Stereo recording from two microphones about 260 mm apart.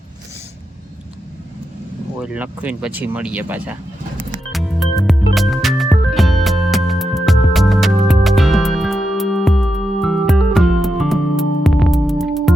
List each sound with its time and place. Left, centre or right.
2.1 s speech: centre
4.5 s music: centre